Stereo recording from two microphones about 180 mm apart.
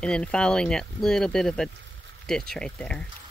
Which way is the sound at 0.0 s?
5° left (ahead or behind).